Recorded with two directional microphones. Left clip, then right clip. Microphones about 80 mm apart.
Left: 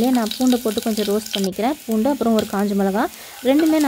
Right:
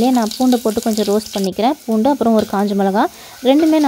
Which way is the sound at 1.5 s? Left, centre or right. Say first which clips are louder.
Right 8 dB; right.